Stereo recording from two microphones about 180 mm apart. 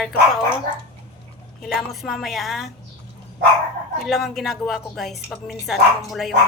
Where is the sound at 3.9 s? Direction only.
Centre (ahead or behind).